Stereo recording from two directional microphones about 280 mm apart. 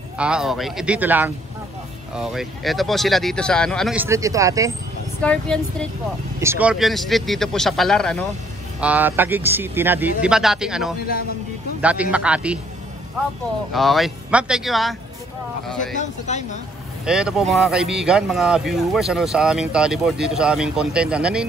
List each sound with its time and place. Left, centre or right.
0.2 s speech: centre
5.2 s speech: centre
6.4 s speech: centre
13.7 s speech: centre
16.0 s speech: left
17.0 s speech: centre